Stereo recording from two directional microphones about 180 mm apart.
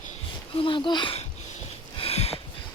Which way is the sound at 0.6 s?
25° left (ahead or behind).